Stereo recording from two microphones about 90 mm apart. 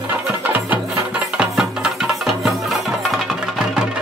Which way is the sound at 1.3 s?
10° right (ahead or behind).